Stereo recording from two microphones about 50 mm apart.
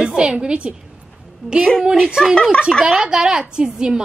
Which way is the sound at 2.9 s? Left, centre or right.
Centre.